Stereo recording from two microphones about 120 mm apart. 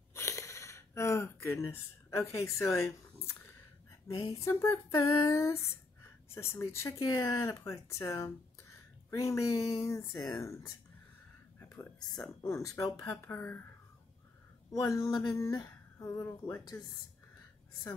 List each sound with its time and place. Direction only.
0.1 s a sound: 25° left (ahead or behind)
4.3 s speech: 25° left (ahead or behind)
12.4 s speech: 25° left (ahead or behind)
14.7 s speech: 25° left (ahead or behind)